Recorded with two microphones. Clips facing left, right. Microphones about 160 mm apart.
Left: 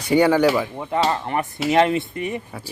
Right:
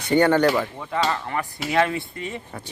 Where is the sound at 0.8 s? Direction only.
25° left (ahead or behind).